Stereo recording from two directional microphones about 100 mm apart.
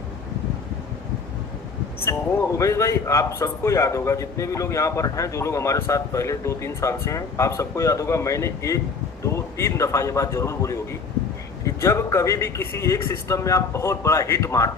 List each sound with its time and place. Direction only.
2.0 s a man's voice: 30° left (ahead or behind)